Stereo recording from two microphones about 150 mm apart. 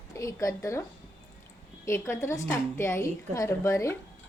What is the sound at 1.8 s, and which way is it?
A woman's voice, 20° left (ahead or behind).